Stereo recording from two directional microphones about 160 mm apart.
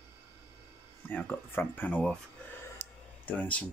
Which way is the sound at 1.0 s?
10° left (ahead or behind).